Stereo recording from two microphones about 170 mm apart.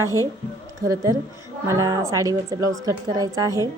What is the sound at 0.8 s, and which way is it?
A woman's voice, 20° right (ahead or behind).